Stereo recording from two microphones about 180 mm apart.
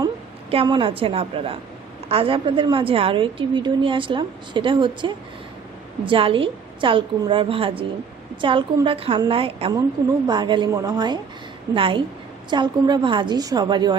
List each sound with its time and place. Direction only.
0.5 s a woman's voice: 30° right (ahead or behind)